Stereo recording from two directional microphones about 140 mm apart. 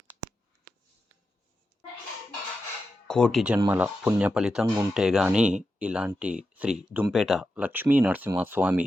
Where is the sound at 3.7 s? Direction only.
10° right (ahead or behind).